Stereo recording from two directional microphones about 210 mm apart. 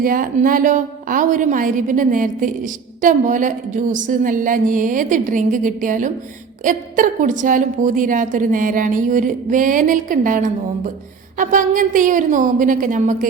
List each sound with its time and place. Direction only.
0.0 s a woman's voice: 40° right (ahead or behind)